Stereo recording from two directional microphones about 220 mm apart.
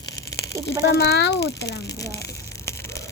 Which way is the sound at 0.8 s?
50° left (ahead or behind).